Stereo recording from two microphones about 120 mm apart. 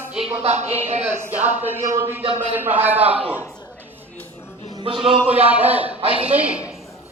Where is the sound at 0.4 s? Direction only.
65° right (ahead or behind).